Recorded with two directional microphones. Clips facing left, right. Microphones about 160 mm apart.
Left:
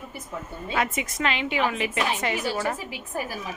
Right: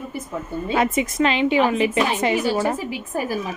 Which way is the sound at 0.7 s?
30° right (ahead or behind).